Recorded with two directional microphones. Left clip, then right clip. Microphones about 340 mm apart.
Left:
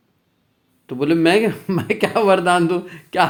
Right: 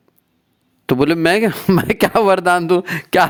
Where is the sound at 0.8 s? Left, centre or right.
Right.